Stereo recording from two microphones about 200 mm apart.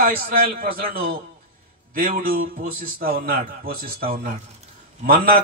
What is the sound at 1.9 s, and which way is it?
A man's voice, 45° right (ahead or behind).